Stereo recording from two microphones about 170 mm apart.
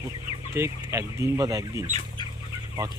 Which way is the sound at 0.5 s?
15° right (ahead or behind).